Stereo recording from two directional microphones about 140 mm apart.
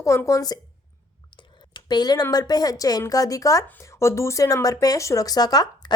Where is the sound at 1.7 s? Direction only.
30° left (ahead or behind).